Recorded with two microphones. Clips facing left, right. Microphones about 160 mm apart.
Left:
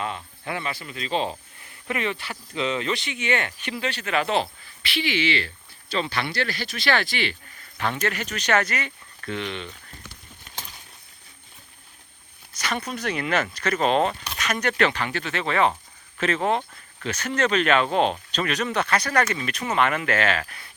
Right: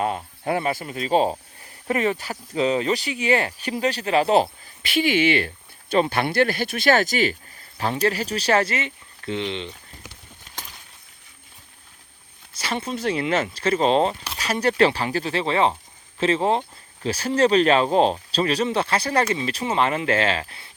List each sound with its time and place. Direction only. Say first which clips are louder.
0.0 s speech: right 6 dB; 45° right (ahead or behind); by 10.1 s 20° right (ahead or behind)
12.5 s speech: right 2 dB; 25° right (ahead or behind)